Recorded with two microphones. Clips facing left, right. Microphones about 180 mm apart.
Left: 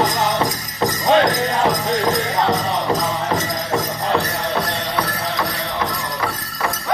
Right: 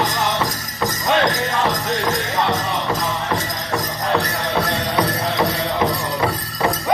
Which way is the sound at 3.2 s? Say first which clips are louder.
Left 2 dB; 20° left (ahead or behind).